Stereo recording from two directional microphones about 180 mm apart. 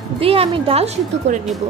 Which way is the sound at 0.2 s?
30° right (ahead or behind).